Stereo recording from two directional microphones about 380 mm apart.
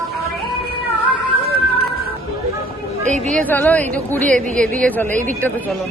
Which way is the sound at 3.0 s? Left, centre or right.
Centre.